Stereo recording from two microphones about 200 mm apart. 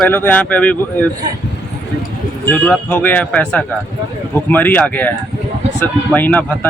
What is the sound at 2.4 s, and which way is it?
Speech, 5° left (ahead or behind).